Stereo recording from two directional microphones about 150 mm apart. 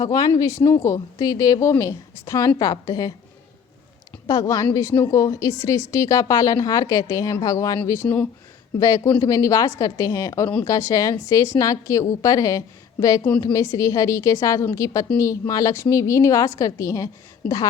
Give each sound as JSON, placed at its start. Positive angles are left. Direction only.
{"t": 0.0, "sound": "a woman's voice", "side_deg": 25}
{"t": 4.3, "sound": "a woman's voice", "side_deg": 25}
{"t": 8.8, "sound": "a woman's voice", "side_deg": 25}